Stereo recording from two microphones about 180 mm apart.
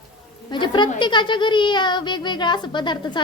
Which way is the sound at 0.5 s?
25° left (ahead or behind).